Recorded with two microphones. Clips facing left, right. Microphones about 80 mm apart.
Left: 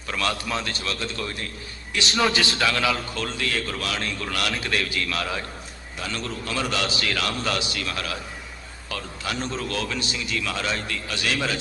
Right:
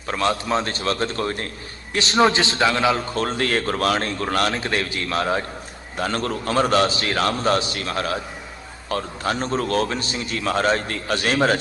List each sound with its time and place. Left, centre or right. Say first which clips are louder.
0.1 s a man's voice: right 6 dB; right
3.2 s a man's voice: right 6 dB; right
6.0 s a man's voice: right 7 dB; right